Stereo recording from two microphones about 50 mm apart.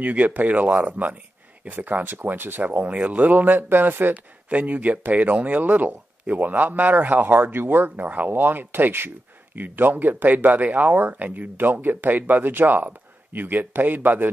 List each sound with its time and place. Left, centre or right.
0.0 s speech: right
4.5 s speech: right